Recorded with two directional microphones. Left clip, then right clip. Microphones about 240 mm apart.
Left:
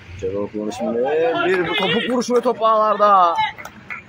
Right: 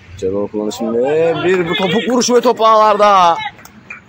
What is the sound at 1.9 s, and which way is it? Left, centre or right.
Speech, right.